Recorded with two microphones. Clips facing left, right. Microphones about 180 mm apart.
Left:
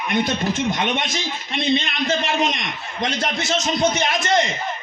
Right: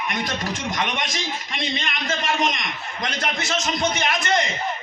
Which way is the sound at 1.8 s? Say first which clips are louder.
Left 5 dB; 30° left (ahead or behind).